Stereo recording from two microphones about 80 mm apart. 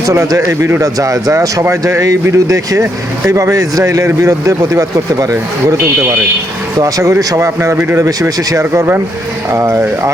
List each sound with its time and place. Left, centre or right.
0.0 s speech: right